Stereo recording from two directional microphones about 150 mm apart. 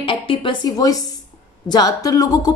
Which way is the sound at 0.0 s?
35° left (ahead or behind).